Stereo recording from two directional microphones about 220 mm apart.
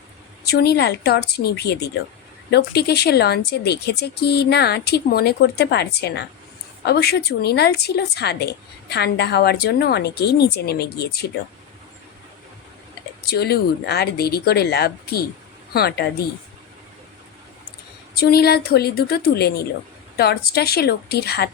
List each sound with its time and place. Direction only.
0.4 s speech: 45° left (ahead or behind)
13.2 s speech: 45° left (ahead or behind)
18.2 s speech: 45° left (ahead or behind)